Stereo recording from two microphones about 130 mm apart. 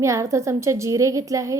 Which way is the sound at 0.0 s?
25° right (ahead or behind).